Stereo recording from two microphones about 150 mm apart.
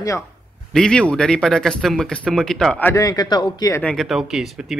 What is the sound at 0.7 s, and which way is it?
Speech, 5° left (ahead or behind).